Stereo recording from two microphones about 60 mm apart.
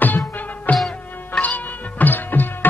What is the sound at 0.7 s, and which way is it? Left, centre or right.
Music, centre.